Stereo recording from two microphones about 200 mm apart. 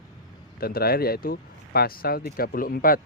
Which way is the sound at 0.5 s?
50° left (ahead or behind).